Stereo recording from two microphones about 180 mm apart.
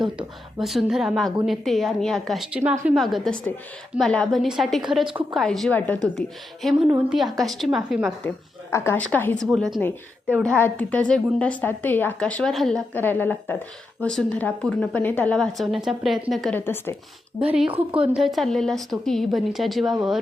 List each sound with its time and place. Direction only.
0.6 s a woman's voice: centre (ahead or behind)
8.7 s a woman's voice: 15° left (ahead or behind)
17.4 s speech: 5° right (ahead or behind)
17.7 s a woman's voice: 30° right (ahead or behind)
18.0 s a woman's voice: 5° right (ahead or behind)